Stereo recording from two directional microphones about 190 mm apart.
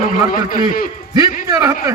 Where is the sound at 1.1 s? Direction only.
20° right (ahead or behind).